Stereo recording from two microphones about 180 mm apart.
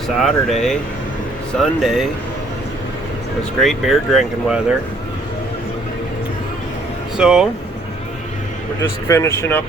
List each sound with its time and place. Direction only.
0.2 s speech: centre (ahead or behind)
3.6 s speech: centre (ahead or behind)
7.2 s speech: 5° right (ahead or behind)
8.8 s speech: 15° left (ahead or behind)